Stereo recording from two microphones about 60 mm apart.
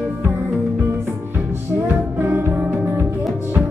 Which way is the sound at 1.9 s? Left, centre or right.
Right.